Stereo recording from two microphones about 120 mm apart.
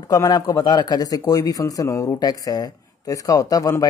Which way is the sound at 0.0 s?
30° left (ahead or behind).